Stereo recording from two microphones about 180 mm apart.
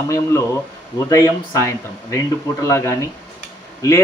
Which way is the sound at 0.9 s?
15° left (ahead or behind).